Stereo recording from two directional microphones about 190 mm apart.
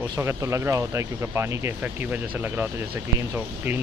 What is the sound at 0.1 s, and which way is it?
Speech, 15° right (ahead or behind).